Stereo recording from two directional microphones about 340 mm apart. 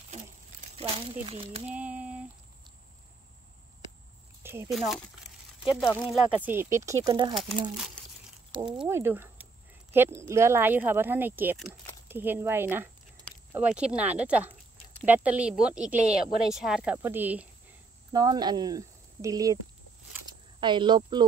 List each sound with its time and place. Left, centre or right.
0.1 s a sound: centre
1.7 s a sound: centre
4.4 s speech: centre
5.7 s speech: centre
5.9 s speech: centre
8.5 s a woman's voice: centre
20.6 s speech: centre